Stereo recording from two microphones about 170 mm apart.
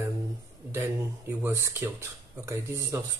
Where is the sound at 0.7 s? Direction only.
15° right (ahead or behind).